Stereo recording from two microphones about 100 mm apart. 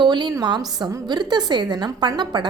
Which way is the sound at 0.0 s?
45° right (ahead or behind).